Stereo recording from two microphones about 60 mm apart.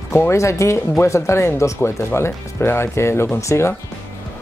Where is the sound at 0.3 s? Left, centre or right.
Left.